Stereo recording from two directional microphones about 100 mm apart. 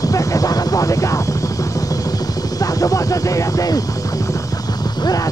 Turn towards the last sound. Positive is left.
turn(degrees=35)  # may be behind; listen again after turning